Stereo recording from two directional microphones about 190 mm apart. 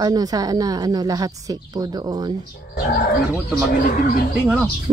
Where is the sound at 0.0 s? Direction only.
20° right (ahead or behind).